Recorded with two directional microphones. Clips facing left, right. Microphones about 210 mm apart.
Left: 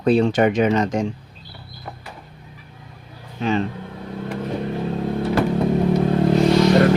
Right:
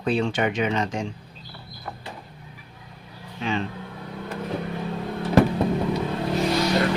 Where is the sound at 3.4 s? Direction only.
40° left (ahead or behind).